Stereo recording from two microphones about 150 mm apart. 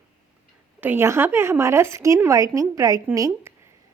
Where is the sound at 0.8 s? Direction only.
15° right (ahead or behind).